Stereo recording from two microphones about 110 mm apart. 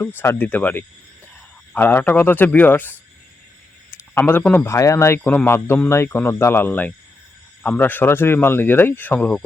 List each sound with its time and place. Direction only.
0.2 s speech: 15° left (ahead or behind)
3.9 s a sound: 20° left (ahead or behind)
4.5 s speech: 25° left (ahead or behind)